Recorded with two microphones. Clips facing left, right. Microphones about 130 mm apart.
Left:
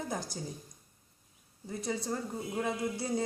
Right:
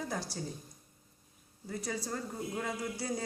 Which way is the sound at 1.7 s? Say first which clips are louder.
Left 2 dB; 20° left (ahead or behind).